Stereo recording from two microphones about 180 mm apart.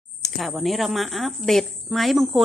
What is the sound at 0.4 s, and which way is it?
A woman's voice, centre (ahead or behind).